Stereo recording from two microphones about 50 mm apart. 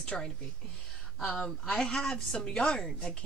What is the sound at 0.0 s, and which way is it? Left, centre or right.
Speech, left.